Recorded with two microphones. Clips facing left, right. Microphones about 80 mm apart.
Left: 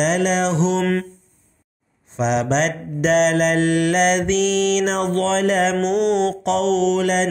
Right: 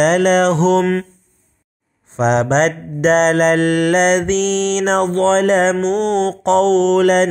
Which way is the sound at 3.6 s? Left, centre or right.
Right.